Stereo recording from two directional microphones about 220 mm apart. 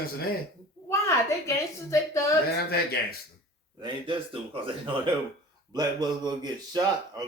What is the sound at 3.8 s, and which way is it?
Speech, 20° right (ahead or behind).